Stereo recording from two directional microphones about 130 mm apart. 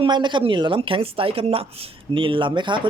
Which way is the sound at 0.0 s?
35° right (ahead or behind).